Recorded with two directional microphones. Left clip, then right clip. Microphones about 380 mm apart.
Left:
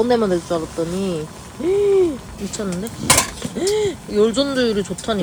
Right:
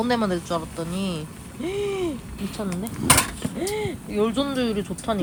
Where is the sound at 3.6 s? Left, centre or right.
Centre.